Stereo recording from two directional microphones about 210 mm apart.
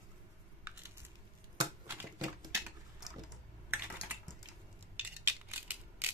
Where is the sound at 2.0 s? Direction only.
15° right (ahead or behind).